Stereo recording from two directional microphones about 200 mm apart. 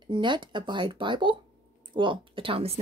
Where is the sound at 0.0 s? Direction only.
25° right (ahead or behind).